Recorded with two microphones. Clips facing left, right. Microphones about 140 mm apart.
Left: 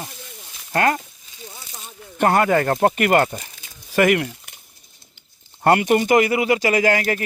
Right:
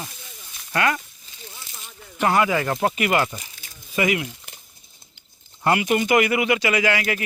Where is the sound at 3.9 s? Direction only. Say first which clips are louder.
Left 6 dB; 65° left (ahead or behind).